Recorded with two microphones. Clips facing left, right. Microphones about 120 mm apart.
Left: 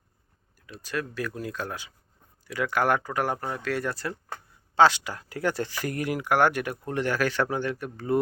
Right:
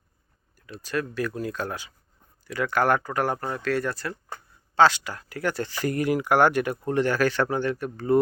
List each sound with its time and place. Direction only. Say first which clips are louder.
0.7 s speech: right 3 dB; 5° left (ahead or behind); by 5.6 s 20° left (ahead or behind)
5.6 s speech: right 5 dB; 5° left (ahead or behind)